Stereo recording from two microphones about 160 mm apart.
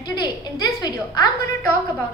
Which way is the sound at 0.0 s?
25° left (ahead or behind).